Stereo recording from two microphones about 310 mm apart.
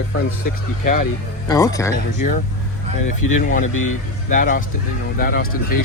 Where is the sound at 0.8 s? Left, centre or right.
Left.